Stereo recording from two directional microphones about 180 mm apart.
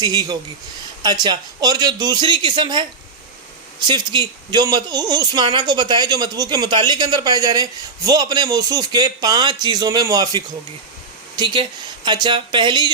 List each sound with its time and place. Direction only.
0.0 s speech: 20° right (ahead or behind)
3.8 s speech: 25° right (ahead or behind)